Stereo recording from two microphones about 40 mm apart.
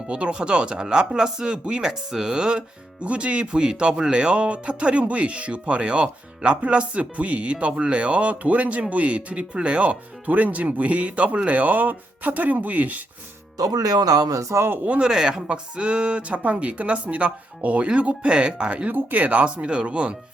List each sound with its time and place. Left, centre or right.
0.1 s speech: right
1.9 s speech: centre; by 9.5 s right
9.5 s speech: right
9.7 s speech: right
14.5 s speech: right
15.0 s speech: centre
18.9 s speech: right